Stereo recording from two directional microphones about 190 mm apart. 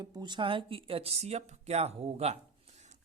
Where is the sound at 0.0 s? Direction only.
25° right (ahead or behind).